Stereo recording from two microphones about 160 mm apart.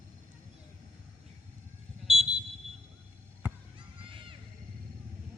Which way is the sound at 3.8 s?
30° right (ahead or behind).